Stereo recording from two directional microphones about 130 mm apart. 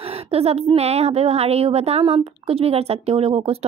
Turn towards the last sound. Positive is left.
turn(degrees=-45)  # may be behind; listen again after turning